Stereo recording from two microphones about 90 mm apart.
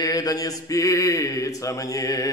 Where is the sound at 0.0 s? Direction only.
40° left (ahead or behind).